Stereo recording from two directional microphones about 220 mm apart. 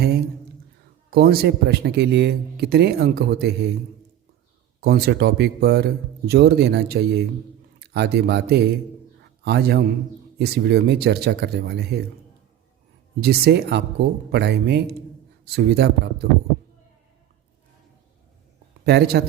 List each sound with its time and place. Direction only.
1.1 s speech: 45° right (ahead or behind)
4.8 s speech: 45° right (ahead or behind)
9.2 s a sound: 50° right (ahead or behind)
10.3 s speech: 45° right (ahead or behind)
13.2 s speech: 45° right (ahead or behind)
18.9 s speech: 45° right (ahead or behind)